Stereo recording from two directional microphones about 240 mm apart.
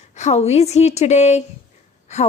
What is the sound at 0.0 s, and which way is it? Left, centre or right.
A woman's voice, left.